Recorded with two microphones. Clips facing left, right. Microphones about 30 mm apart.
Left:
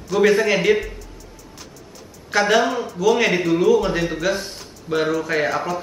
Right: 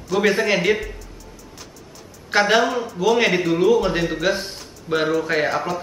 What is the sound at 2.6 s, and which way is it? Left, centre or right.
A man's voice, centre.